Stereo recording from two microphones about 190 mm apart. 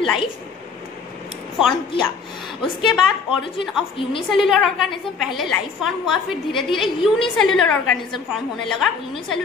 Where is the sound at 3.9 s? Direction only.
25° left (ahead or behind).